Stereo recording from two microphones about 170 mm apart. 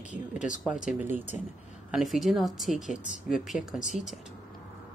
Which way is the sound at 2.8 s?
45° left (ahead or behind).